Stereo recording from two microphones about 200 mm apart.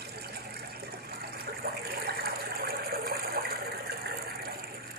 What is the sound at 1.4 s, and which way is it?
Water, 50° right (ahead or behind).